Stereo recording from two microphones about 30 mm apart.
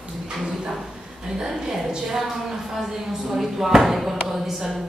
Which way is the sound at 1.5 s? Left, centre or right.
Centre.